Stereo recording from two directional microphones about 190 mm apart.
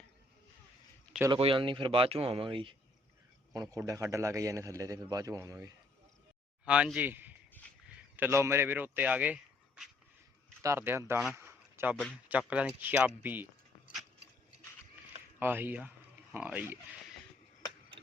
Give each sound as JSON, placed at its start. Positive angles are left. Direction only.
{"t": 1.3, "sound": "a man's voice", "side_deg": -25}
{"t": 11.3, "sound": "a sound", "side_deg": -10}
{"t": 12.3, "sound": "speech", "side_deg": -5}
{"t": 15.4, "sound": "a man's voice", "side_deg": -10}